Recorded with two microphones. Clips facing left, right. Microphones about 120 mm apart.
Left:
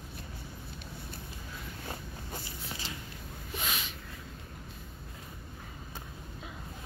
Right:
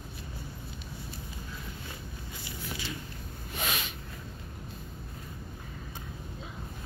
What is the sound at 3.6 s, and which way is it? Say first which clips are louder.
Snort: right 3 dB; 65° right (ahead or behind).